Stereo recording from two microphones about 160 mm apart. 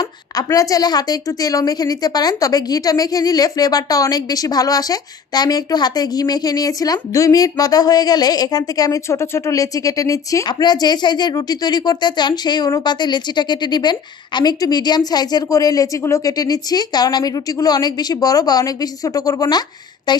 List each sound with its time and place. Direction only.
0.4 s a woman's voice: 20° left (ahead or behind)